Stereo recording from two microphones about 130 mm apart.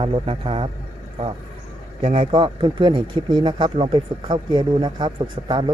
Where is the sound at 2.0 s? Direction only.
40° right (ahead or behind).